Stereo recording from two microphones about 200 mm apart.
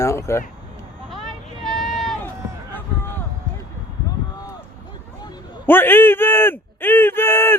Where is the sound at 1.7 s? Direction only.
Centre (ahead or behind).